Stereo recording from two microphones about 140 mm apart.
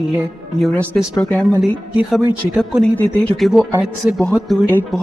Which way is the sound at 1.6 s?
5° right (ahead or behind).